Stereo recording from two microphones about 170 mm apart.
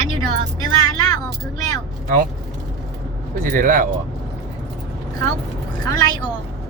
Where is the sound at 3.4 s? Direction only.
55° right (ahead or behind).